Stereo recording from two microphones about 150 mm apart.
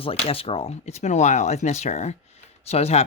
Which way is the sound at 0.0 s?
40° left (ahead or behind).